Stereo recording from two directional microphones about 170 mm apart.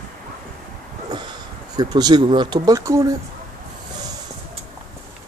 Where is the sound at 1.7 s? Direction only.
25° right (ahead or behind).